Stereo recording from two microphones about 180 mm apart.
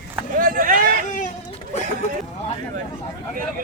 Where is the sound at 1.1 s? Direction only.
45° left (ahead or behind).